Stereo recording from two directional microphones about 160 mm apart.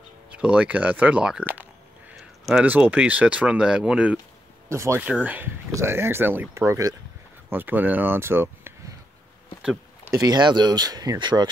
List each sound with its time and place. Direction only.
0.3 s speech: 10° right (ahead or behind)
2.1 s a sound: centre (ahead or behind)
2.6 s speech: 10° right (ahead or behind)
4.6 s speech: 15° right (ahead or behind)
9.6 s a sound: 5° right (ahead or behind)
10.1 s speech: 25° right (ahead or behind)